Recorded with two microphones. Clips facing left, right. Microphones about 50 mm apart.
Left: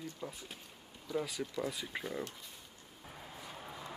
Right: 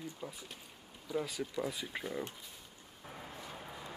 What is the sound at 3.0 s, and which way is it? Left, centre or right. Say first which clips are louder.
Vehicle: right 3 dB; centre.